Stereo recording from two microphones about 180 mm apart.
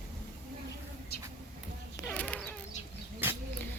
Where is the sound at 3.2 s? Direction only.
10° right (ahead or behind).